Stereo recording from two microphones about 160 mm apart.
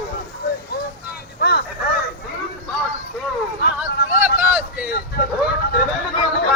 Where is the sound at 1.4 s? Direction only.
70° left (ahead or behind).